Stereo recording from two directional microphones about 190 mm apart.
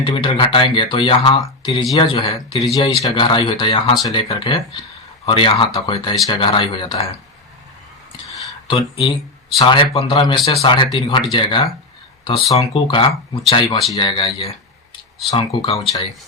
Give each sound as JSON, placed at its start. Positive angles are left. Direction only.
{"t": 0.0, "sound": "speech", "side_deg": 25}
{"t": 8.6, "sound": "speech", "side_deg": 30}